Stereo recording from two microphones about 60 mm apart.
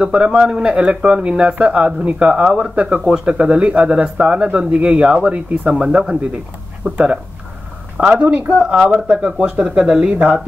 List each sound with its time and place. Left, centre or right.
0.0 s speech: centre